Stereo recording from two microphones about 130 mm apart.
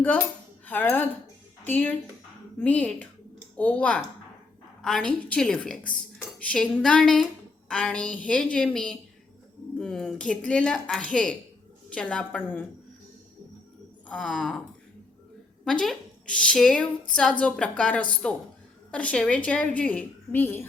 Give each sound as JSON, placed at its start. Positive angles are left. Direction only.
{"t": 0.6, "sound": "cutlery", "side_deg": 15}
{"t": 1.6, "sound": "a woman's voice", "side_deg": 15}
{"t": 14.1, "sound": "a woman's voice", "side_deg": 5}
{"t": 15.6, "sound": "a woman's voice", "side_deg": 5}